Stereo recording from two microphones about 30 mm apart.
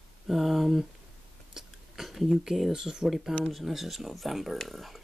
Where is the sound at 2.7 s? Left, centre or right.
Right.